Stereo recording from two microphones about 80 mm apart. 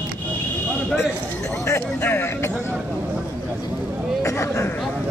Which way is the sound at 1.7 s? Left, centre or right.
Left.